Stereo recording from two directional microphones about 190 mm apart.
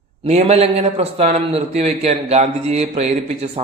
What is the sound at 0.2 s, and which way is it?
A man's voice, 35° right (ahead or behind).